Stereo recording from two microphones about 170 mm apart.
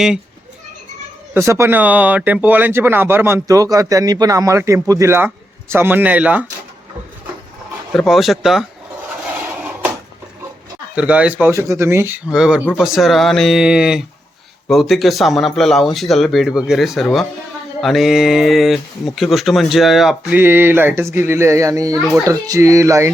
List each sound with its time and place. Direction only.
1.3 s speech: 15° right (ahead or behind)
7.9 s speech: centre (ahead or behind)
10.9 s speech: 5° right (ahead or behind)